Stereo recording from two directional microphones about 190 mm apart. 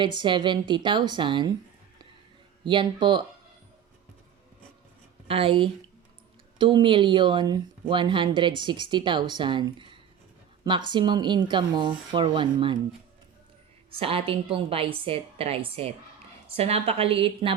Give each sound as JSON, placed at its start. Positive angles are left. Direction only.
{"t": 0.0, "sound": "a woman's voice", "side_deg": -25}
{"t": 2.6, "sound": "a woman's voice", "side_deg": -25}
{"t": 5.3, "sound": "a woman's voice", "side_deg": -30}
{"t": 14.0, "sound": "a woman's voice", "side_deg": -30}